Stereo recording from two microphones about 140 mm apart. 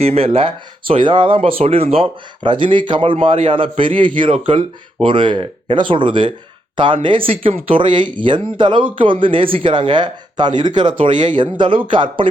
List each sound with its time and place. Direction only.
0.0 s speech: 45° right (ahead or behind)